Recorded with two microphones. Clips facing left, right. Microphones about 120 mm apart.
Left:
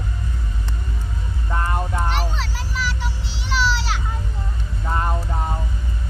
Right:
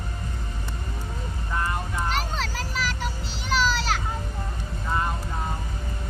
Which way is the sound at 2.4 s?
45° right (ahead or behind).